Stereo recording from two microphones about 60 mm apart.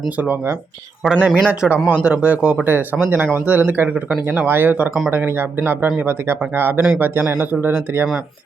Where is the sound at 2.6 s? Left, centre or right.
Right.